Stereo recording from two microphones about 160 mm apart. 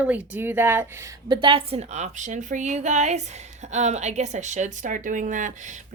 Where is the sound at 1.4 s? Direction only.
35° right (ahead or behind).